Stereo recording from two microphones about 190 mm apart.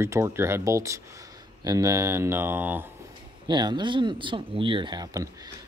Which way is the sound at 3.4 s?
25° right (ahead or behind).